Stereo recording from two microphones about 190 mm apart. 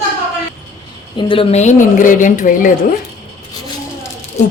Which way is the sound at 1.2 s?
25° left (ahead or behind).